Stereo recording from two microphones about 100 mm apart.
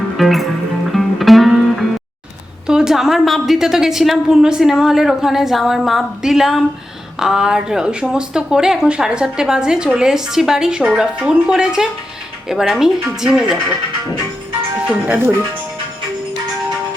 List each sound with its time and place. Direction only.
0.2 s a woman's voice: centre (ahead or behind)
0.9 s music: centre (ahead or behind)
2.6 s a woman's voice: 5° right (ahead or behind)
14.8 s speech: 15° right (ahead or behind)